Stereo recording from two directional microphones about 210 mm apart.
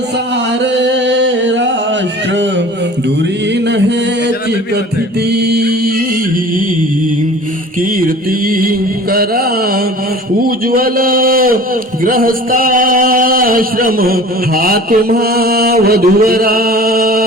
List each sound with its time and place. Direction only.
0.6 s singing: 55° right (ahead or behind)
3.5 s music: 55° right (ahead or behind)
5.3 s music: 50° right (ahead or behind)
7.8 s mantra: 40° right (ahead or behind)
10.4 s a sound: 45° right (ahead or behind)